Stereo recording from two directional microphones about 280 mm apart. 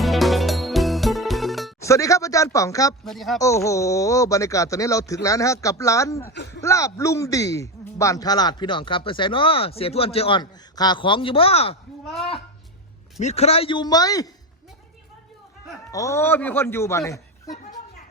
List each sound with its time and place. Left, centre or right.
0.0 s music: centre
1.8 s a man's voice: centre
3.0 s speech: centre
3.4 s a man's voice: centre
13.1 s a man's voice: left
15.9 s a man's voice: centre